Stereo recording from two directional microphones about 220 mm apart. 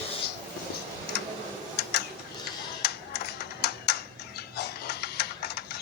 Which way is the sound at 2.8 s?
50° left (ahead or behind).